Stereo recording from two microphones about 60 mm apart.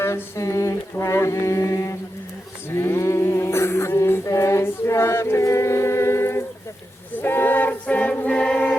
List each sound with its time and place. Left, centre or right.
0.0 s mantra: left
2.6 s a sound: left
7.2 s choir: left; by 8.7 s centre